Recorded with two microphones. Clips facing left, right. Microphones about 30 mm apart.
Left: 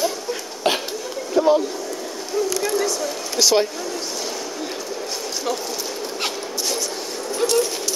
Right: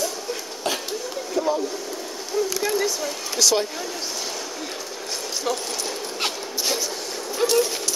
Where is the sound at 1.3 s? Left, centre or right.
Left.